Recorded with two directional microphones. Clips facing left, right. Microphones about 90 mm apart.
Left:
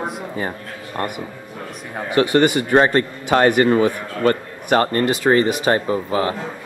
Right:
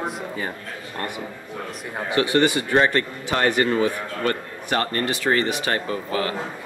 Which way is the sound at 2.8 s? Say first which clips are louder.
Left 4 dB; 35° left (ahead or behind).